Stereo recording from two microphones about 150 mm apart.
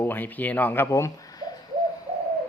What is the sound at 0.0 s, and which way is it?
Speech, 10° left (ahead or behind).